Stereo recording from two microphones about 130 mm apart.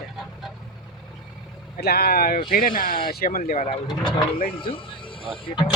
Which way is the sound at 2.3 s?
90° left.